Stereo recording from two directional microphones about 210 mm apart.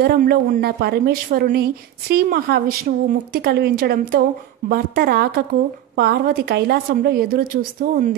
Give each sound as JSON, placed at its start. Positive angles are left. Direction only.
{"t": 0.0, "sound": "a woman's voice", "side_deg": -45}